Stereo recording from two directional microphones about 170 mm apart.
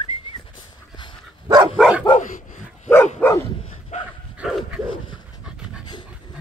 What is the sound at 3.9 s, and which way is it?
Dog, 40° left (ahead or behind).